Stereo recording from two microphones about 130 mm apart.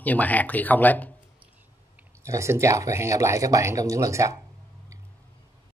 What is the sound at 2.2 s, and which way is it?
Speech, 20° right (ahead or behind).